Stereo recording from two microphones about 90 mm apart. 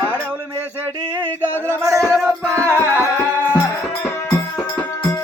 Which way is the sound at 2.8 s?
30° left (ahead or behind).